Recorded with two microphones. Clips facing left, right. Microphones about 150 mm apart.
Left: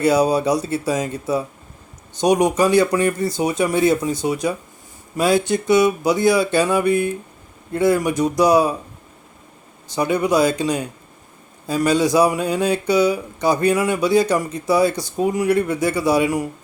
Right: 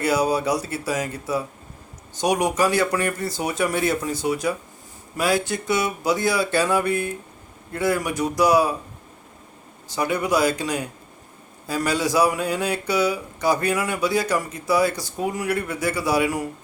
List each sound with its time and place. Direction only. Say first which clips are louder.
0.0 s speech: left 5 dB; 20° left (ahead or behind)
9.9 s speech: left 4 dB; 20° left (ahead or behind)